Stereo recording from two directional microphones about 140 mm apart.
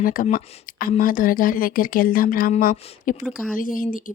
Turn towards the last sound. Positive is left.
turn(degrees=75)  # may be behind; listen again after turning